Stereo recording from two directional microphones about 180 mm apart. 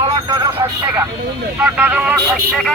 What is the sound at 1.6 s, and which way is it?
Speech, 10° right (ahead or behind).